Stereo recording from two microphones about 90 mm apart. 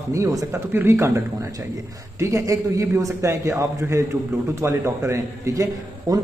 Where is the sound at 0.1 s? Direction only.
40° right (ahead or behind).